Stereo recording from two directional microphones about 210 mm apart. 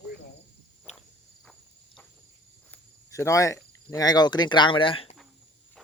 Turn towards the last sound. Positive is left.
turn(degrees=25)  # may be behind; listen again after turning